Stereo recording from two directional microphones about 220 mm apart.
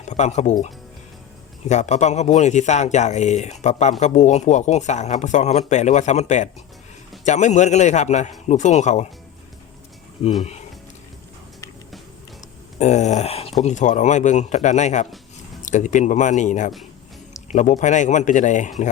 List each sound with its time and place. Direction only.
0.1 s speech: 30° left (ahead or behind)
12.8 s speech: 30° left (ahead or behind)